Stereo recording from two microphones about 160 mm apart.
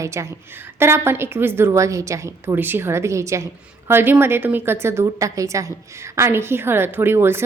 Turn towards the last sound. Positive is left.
turn(degrees=-15)  # may be behind; listen again after turning